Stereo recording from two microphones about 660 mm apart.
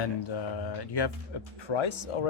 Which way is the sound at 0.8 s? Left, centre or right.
Left.